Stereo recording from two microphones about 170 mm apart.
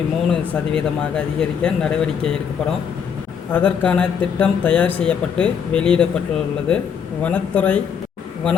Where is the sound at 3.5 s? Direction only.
10° left (ahead or behind).